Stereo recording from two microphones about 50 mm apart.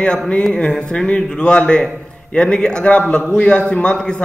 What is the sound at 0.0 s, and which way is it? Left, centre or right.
Speech, centre.